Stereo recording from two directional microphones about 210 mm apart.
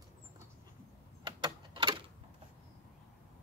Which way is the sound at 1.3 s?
20° right (ahead or behind).